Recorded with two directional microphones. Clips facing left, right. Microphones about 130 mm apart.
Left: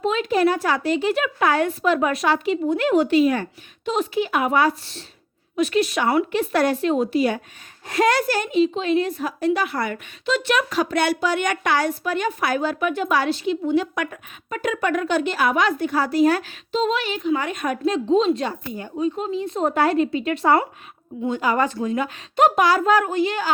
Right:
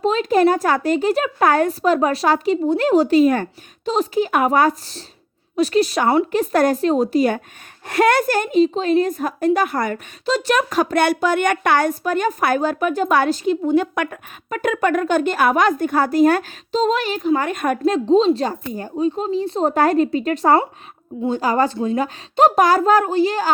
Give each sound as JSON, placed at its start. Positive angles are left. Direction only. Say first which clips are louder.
{"t": 0.0, "sound": "a woman's voice", "louder": "right 4 dB", "side_deg": -35}
{"t": 3.8, "sound": "a woman's voice", "louder": "right 3 dB", "side_deg": -35}
{"t": 7.9, "sound": "a woman's voice", "louder": "right 3 dB", "side_deg": -60}